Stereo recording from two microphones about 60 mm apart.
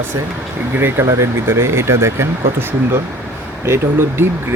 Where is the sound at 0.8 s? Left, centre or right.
Right.